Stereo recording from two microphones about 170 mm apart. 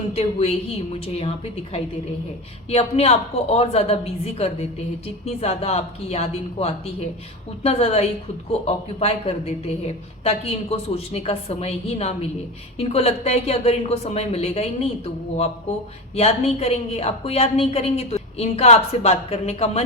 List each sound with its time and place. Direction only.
0.1 s speech: 35° left (ahead or behind)
16.1 s speech: 35° left (ahead or behind)